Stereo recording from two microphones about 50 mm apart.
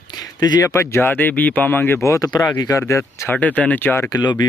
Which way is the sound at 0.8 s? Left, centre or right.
Left.